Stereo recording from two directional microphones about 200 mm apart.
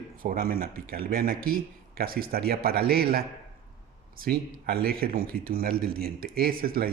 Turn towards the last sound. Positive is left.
turn(degrees=-50)  # may be behind; listen again after turning